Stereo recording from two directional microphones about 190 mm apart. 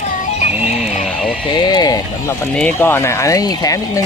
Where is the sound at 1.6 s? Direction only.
20° left (ahead or behind).